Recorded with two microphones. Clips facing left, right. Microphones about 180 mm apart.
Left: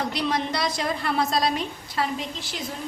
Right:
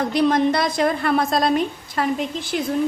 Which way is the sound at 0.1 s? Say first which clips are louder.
Right 9 dB; 50° right (ahead or behind).